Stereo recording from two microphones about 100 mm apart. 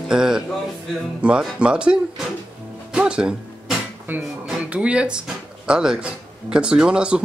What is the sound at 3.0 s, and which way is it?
Speech, 10° right (ahead or behind).